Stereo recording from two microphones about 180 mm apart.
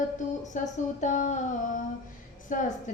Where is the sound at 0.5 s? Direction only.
45° left (ahead or behind).